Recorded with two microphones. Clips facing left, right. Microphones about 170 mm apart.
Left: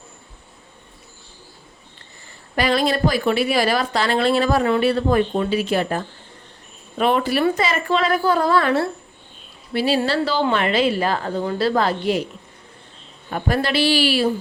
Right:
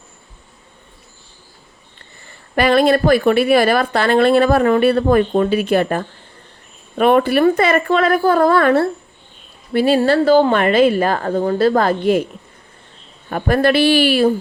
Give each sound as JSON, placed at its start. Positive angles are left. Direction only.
{"t": 2.6, "sound": "a woman's voice", "side_deg": -55}
{"t": 13.3, "sound": "a woman's voice", "side_deg": -55}